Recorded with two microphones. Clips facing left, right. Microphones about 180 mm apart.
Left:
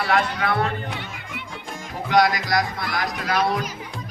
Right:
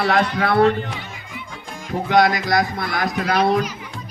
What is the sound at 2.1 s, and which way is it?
Speech, 25° right (ahead or behind).